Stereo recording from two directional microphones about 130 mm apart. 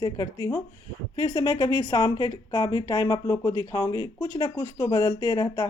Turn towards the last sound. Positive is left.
turn(degrees=35)  # may be behind; listen again after turning